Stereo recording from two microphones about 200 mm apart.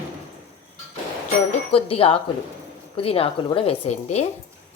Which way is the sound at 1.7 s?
30° left (ahead or behind).